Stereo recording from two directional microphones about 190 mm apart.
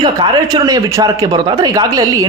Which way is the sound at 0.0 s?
20° right (ahead or behind).